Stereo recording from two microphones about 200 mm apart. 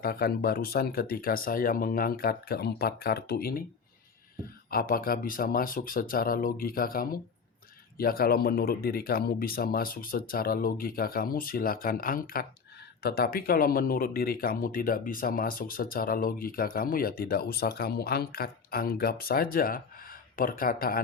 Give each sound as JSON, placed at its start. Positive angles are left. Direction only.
{"t": 0.0, "sound": "speech", "side_deg": 50}
{"t": 4.7, "sound": "speech", "side_deg": 45}